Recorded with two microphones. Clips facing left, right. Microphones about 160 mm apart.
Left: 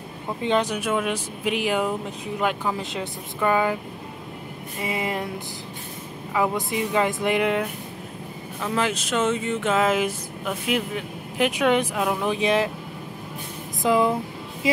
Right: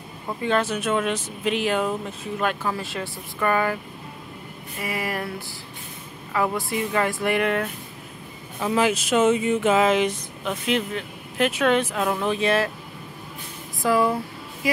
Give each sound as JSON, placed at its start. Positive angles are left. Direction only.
{"t": 0.4, "sound": "speech", "side_deg": 20}
{"t": 4.7, "sound": "a sound", "side_deg": 20}
{"t": 6.3, "sound": "speech", "side_deg": 15}
{"t": 8.5, "sound": "speech", "side_deg": -10}
{"t": 9.8, "sound": "speech", "side_deg": 5}
{"t": 13.8, "sound": "a woman's voice", "side_deg": 20}